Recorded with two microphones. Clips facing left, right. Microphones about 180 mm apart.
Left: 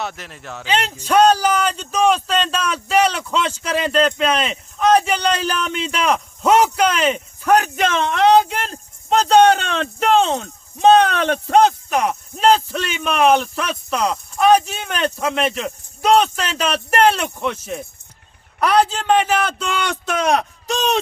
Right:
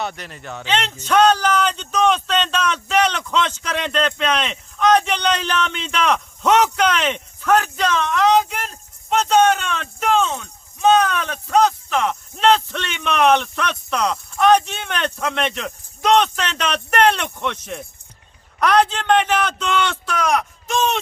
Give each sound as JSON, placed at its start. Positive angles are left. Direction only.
{"t": 0.0, "sound": "speech", "side_deg": 0}
{"t": 7.6, "sound": "speech", "side_deg": 25}
{"t": 20.1, "sound": "speech", "side_deg": 30}